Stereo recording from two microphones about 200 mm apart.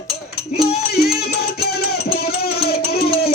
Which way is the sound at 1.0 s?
50° left (ahead or behind).